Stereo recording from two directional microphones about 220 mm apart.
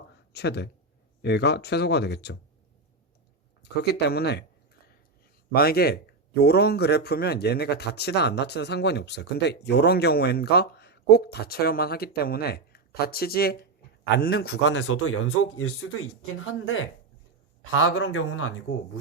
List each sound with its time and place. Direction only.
0.3 s a man's voice: 50° left (ahead or behind)
3.6 s a man's voice: 50° left (ahead or behind)
5.5 s a man's voice: 45° left (ahead or behind)
14.8 s speech: 75° left (ahead or behind)